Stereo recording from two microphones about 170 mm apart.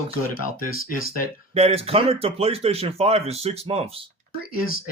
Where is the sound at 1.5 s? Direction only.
35° right (ahead or behind).